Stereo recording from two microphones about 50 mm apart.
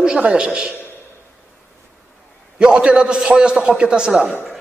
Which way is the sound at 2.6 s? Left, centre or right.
Centre.